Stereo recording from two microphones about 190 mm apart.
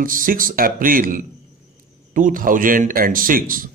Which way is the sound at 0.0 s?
45° right (ahead or behind).